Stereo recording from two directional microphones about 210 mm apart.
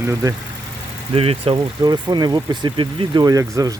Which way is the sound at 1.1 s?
25° right (ahead or behind).